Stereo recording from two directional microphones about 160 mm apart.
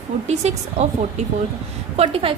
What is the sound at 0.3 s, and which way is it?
Speech, 45° right (ahead or behind).